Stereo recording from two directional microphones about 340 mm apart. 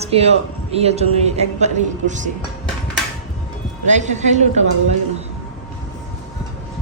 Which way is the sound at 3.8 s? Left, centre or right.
Right.